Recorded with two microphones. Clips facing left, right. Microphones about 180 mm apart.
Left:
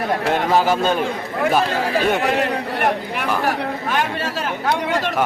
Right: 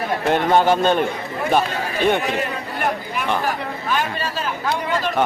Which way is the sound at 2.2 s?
85° left.